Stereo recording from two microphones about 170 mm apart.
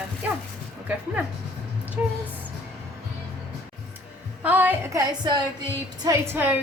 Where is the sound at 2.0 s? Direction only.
10° right (ahead or behind).